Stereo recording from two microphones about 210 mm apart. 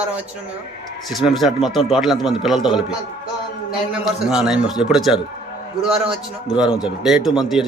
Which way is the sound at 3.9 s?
5° right (ahead or behind).